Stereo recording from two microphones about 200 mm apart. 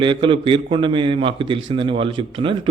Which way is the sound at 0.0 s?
25° right (ahead or behind).